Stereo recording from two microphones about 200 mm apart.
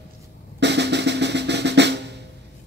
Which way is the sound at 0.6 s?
60° right (ahead or behind).